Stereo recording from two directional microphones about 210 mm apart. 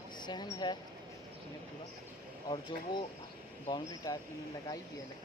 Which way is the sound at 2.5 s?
20° left (ahead or behind).